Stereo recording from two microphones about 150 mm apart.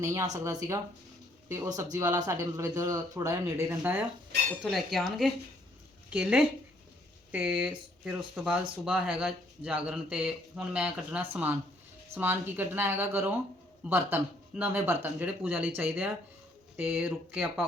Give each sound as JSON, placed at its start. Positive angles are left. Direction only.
{"t": 0.0, "sound": "speech", "side_deg": -25}
{"t": 4.6, "sound": "speech", "side_deg": 0}